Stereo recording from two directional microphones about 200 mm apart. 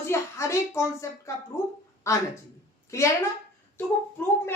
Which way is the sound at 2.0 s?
15° left (ahead or behind).